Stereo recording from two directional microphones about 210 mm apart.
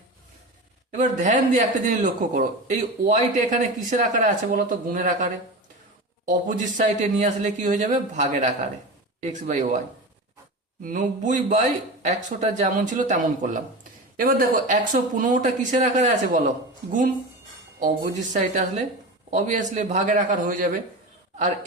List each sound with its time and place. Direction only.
0.9 s a man's voice: 40° right (ahead or behind)
6.7 s a man's voice: 35° right (ahead or behind)
10.8 s a man's voice: 35° right (ahead or behind)
17.7 s a man's voice: 40° right (ahead or behind)